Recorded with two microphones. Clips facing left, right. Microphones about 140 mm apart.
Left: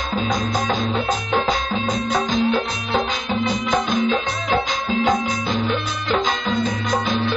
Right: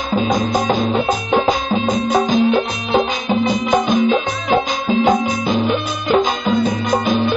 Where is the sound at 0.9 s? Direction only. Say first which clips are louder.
Right 5 dB; 10° right (ahead or behind).